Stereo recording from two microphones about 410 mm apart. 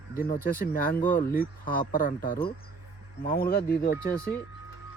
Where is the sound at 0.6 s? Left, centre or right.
Left.